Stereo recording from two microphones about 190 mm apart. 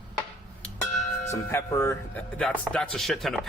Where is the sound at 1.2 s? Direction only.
15° left (ahead or behind).